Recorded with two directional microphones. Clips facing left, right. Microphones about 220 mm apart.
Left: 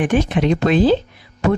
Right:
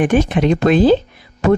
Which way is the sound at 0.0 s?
45° right (ahead or behind).